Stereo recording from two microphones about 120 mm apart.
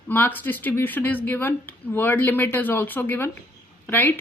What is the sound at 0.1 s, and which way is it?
A woman's voice, 15° left (ahead or behind).